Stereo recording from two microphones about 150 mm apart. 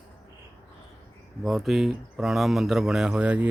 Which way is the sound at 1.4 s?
Centre (ahead or behind).